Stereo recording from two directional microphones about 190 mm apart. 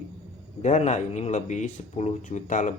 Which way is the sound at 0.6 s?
35° left (ahead or behind).